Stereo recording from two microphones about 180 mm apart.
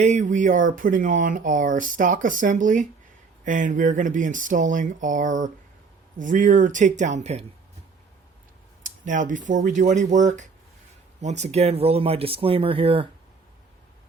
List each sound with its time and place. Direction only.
0.0 s speech: 45° right (ahead or behind)
8.8 s speech: 45° right (ahead or behind)